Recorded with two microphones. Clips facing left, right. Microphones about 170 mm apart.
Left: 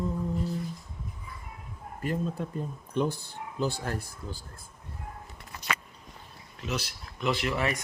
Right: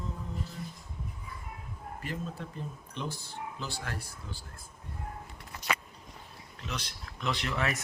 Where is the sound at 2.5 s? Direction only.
50° left (ahead or behind).